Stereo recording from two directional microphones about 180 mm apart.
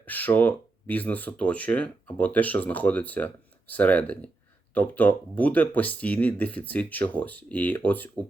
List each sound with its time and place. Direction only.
0.0 s speech: 10° left (ahead or behind)